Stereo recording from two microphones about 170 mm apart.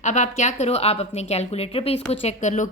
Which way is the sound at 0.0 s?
45° left (ahead or behind).